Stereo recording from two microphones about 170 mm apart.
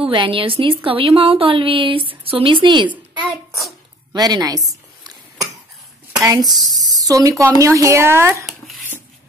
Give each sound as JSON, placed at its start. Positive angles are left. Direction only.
{"t": 0.1, "sound": "a woman's voice", "side_deg": -30}
{"t": 4.1, "sound": "speech", "side_deg": -25}
{"t": 6.2, "sound": "speech", "side_deg": -20}
{"t": 8.5, "sound": "a sound", "side_deg": 0}